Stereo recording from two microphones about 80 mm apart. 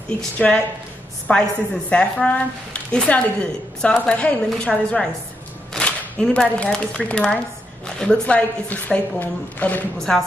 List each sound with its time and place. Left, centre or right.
0.4 s a woman's voice: centre
9.9 s a woman's voice: centre